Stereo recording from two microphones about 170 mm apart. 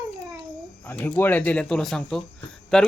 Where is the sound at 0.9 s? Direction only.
10° left (ahead or behind).